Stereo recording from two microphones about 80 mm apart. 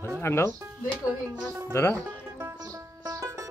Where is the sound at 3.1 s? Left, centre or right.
Right.